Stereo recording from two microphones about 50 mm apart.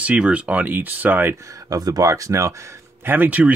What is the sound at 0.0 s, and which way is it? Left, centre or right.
Speech, right.